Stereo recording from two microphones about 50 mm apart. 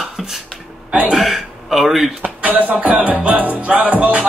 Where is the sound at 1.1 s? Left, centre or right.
Centre.